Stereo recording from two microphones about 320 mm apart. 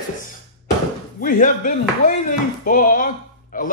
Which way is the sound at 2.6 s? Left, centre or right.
Left.